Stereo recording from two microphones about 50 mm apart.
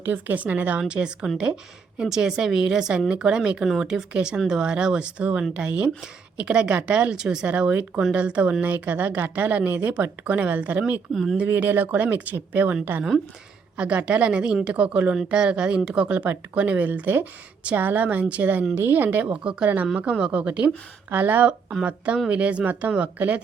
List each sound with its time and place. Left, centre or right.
0.0 s speech: right
0.8 s speech: centre
11.1 s speech: centre
11.4 s speech: right
13.7 s speech: right
15.1 s speech: centre
16.0 s speech: right
19.2 s speech: right
21.1 s speech: right
21.8 s speech: right